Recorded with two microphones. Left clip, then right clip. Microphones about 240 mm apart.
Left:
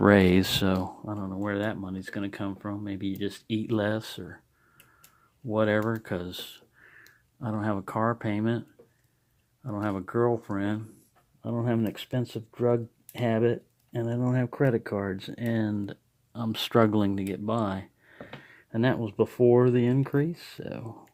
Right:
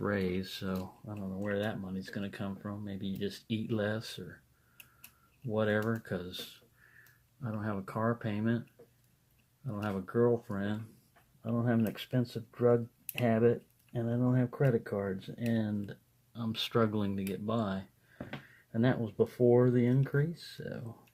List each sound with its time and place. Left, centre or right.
0.0 s speech: left
5.5 s speech: left
9.7 s speech: left